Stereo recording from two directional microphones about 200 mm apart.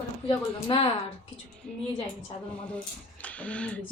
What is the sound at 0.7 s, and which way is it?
Speech, 25° left (ahead or behind).